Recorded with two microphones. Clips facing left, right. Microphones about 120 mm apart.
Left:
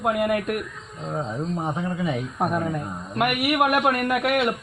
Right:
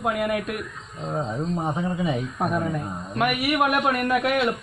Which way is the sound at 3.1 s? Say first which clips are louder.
Left 1 dB; 10° left (ahead or behind).